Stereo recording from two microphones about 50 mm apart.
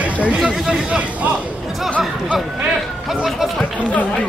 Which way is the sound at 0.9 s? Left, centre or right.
Right.